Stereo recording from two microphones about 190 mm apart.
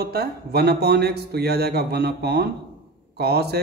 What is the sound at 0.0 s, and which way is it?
A man's voice, 55° right (ahead or behind).